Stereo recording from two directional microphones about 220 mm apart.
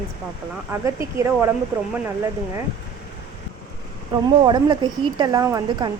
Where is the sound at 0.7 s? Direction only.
15° right (ahead or behind).